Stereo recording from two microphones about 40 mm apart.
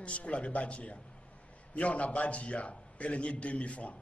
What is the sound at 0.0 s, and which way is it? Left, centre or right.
A man's voice, left.